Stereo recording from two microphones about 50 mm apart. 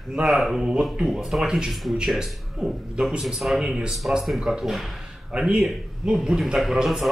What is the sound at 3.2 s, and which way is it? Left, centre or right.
Speech, centre.